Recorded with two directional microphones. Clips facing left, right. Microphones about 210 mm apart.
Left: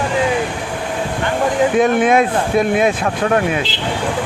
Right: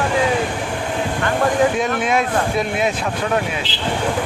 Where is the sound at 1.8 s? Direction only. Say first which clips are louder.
Left 6 dB; 55° left (ahead or behind).